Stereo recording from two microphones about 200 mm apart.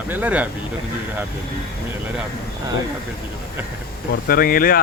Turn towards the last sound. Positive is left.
turn(degrees=45)  # may be behind; listen again after turning